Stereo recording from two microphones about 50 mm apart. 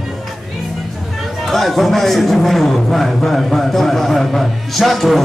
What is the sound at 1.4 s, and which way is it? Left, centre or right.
A man's voice, centre.